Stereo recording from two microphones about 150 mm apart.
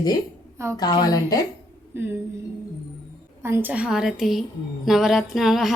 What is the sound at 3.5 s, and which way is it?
A woman's voice, 15° right (ahead or behind).